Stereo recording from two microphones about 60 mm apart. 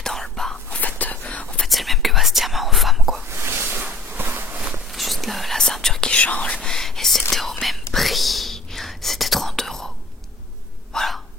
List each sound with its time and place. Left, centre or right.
0.0 s whispering: centre
0.7 s whispering: left
1.7 s whispering: centre
3.3 s a sound: right
4.9 s whispering: centre; by 6.6 s left
6.6 s whispering: centre
10.9 s hiccup: centre